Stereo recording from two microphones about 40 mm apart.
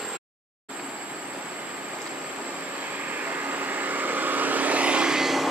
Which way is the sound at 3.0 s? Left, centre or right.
Right.